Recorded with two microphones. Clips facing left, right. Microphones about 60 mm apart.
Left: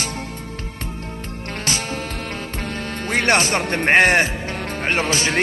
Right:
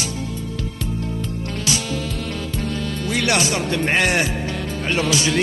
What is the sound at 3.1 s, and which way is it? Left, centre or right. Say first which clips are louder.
Speech: left 3 dB; left.